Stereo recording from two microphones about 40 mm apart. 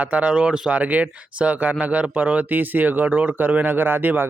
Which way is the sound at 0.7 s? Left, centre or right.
Right.